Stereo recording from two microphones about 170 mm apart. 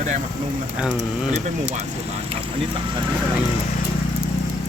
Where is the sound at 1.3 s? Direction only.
45° right (ahead or behind).